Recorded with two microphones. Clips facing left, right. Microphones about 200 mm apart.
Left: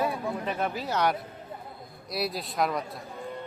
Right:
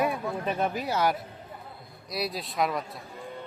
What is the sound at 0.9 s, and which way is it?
Speech, 5° right (ahead or behind).